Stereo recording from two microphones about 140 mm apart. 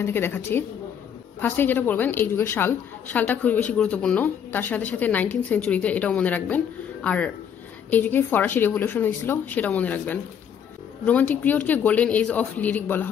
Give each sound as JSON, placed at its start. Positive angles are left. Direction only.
{"t": 0.0, "sound": "a woman's voice", "side_deg": 15}